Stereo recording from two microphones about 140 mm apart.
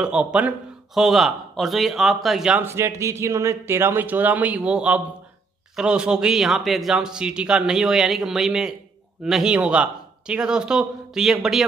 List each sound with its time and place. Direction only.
0.0 s a man's voice: 5° right (ahead or behind)
2.6 s a man's voice: 20° right (ahead or behind); by 11.6 s 5° right (ahead or behind)